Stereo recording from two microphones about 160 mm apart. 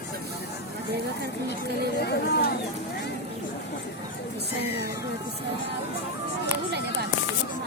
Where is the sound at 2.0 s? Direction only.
90° left.